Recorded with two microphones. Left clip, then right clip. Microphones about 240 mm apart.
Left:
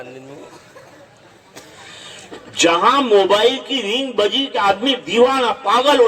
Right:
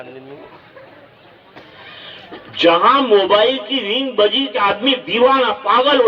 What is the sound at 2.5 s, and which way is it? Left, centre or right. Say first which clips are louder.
A man's voice: right 2 dB; left.